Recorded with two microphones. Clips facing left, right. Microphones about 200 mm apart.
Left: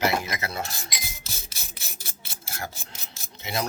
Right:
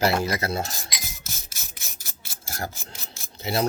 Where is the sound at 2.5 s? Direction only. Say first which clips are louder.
Right 3 dB; 35° right (ahead or behind).